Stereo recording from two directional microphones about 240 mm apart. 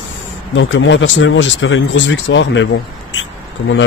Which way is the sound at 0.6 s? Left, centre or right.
Left.